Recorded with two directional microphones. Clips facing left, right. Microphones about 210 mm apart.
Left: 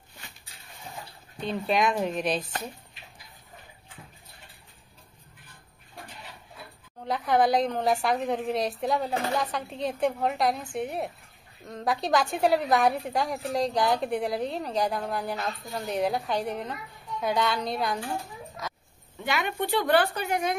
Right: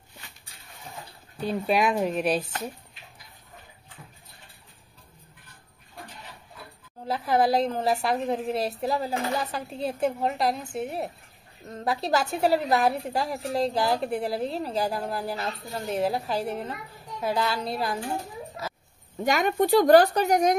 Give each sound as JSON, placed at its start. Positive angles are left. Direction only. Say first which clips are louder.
{"t": 1.4, "sound": "speech", "louder": "right 2 dB", "side_deg": -10}
{"t": 7.1, "sound": "a woman's voice", "louder": "even", "side_deg": -5}
{"t": 19.1, "sound": "speech", "louder": "right 6 dB", "side_deg": -40}